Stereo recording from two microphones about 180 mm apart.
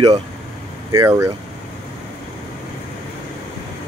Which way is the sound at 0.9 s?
15° right (ahead or behind).